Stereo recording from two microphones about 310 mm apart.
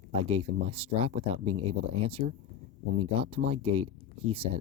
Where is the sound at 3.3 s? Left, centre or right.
Centre.